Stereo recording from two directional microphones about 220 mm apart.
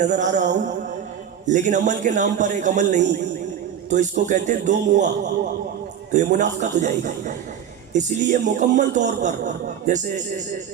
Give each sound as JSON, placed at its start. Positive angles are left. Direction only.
{"t": 0.0, "sound": "speech", "side_deg": -35}